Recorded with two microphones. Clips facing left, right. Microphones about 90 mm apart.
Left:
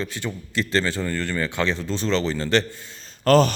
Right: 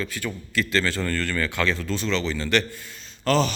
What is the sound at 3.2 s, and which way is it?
Speech, 45° left (ahead or behind).